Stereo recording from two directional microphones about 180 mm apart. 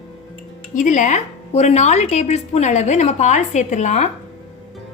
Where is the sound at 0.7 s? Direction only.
45° left (ahead or behind).